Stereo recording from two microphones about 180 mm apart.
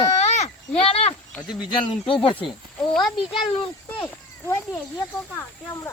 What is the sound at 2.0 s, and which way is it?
Speech, 30° left (ahead or behind).